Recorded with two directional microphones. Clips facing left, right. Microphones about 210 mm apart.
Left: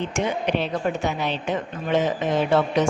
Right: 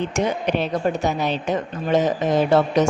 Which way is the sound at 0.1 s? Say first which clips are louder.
Right 2 dB; 45° right (ahead or behind).